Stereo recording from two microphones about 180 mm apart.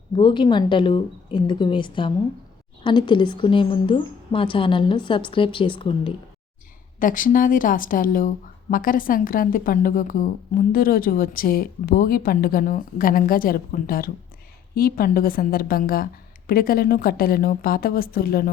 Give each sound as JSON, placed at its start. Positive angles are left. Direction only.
{"t": 0.2, "sound": "a woman's voice", "side_deg": 25}
{"t": 7.0, "sound": "a woman's voice", "side_deg": 50}